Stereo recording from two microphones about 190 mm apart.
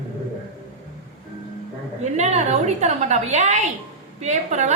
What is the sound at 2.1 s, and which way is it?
A woman's voice, 35° right (ahead or behind).